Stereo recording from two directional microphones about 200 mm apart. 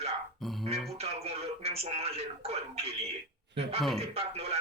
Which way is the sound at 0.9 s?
30° right (ahead or behind).